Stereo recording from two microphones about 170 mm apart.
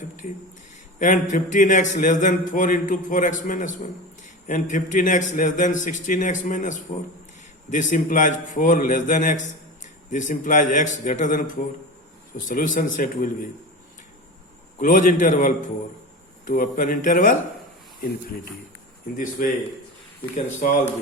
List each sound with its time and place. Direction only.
0.9 s speech: 50° left (ahead or behind)
14.8 s speech: 50° left (ahead or behind)
19.1 s speech: 50° left (ahead or behind)